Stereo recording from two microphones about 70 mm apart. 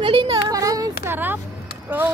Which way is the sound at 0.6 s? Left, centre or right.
Right.